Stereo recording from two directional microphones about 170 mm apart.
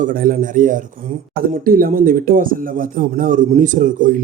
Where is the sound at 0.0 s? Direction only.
55° right (ahead or behind).